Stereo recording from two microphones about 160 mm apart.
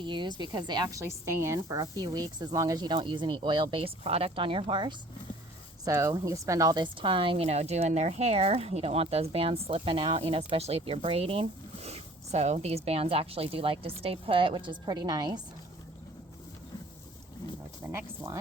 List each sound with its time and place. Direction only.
0.0 s a woman's voice: 30° right (ahead or behind)
17.8 s speech: 15° right (ahead or behind)